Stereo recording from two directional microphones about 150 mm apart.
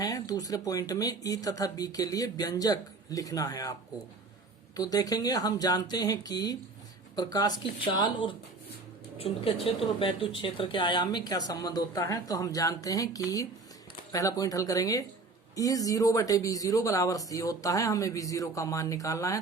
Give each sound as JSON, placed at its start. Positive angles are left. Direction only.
{"t": 0.0, "sound": "speech", "side_deg": 25}